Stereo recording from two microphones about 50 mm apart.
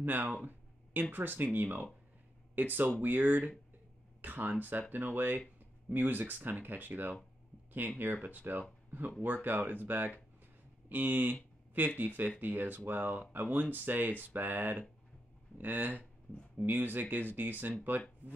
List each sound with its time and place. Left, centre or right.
0.0 s speech: right